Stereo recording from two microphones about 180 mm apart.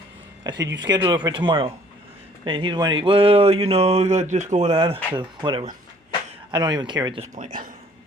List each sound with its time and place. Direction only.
0.4 s speech: 25° right (ahead or behind)
7.2 s speech: 40° right (ahead or behind)